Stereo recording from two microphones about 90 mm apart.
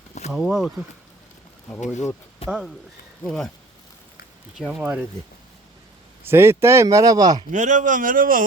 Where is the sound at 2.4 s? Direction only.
90° left.